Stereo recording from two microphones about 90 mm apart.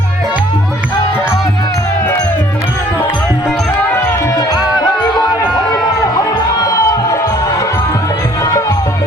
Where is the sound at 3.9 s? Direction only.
25° left (ahead or behind).